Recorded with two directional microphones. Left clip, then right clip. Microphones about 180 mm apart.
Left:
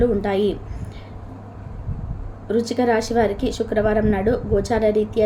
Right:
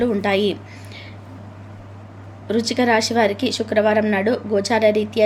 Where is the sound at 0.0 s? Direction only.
20° right (ahead or behind).